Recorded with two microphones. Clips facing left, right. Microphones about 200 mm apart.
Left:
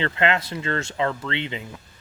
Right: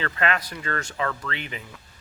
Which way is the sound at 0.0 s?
25° left (ahead or behind).